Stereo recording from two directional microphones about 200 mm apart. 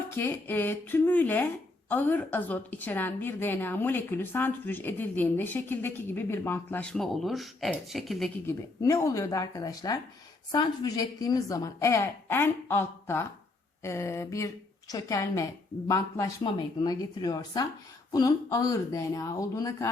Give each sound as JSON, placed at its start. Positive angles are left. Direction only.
{"t": 0.2, "sound": "a woman's voice", "side_deg": 10}
{"t": 8.4, "sound": "a woman's voice", "side_deg": 15}